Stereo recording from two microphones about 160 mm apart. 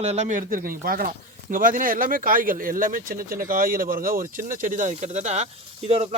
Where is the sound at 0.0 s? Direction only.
45° right (ahead or behind).